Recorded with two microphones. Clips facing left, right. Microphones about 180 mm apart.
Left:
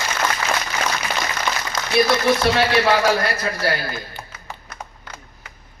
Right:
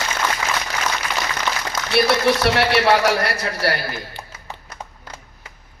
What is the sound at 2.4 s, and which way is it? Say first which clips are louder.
A man's voice: even; 70° right (ahead or behind).